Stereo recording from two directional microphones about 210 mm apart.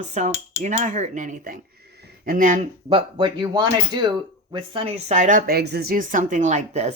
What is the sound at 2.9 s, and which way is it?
Speech, 20° right (ahead or behind).